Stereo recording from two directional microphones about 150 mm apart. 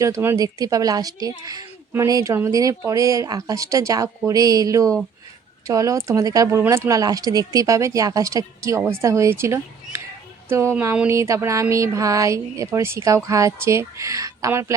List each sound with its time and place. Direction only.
0.0 s speech: 20° right (ahead or behind)